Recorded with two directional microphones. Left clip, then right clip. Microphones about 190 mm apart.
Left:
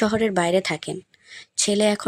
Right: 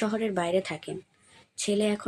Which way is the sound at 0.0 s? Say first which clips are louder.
Left 8 dB; 50° left (ahead or behind).